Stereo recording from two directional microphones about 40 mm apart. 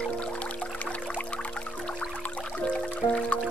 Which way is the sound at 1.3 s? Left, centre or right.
Left.